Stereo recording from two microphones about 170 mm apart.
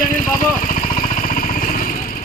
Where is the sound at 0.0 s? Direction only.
50° left (ahead or behind).